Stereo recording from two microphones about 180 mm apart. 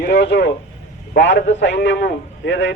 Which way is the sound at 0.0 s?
70° left (ahead or behind).